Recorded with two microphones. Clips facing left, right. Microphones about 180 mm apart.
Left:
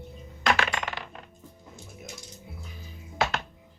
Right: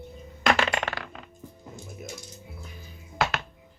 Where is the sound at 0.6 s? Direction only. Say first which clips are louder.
Right 3 dB; 75° right (ahead or behind).